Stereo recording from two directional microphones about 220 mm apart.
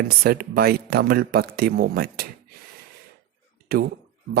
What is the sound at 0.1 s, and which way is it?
A man's voice, 45° right (ahead or behind).